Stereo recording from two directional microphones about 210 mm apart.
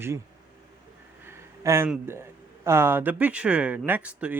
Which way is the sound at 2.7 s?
10° right (ahead or behind).